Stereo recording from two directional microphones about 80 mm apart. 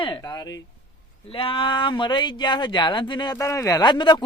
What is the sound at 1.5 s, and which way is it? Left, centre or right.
Speech, left.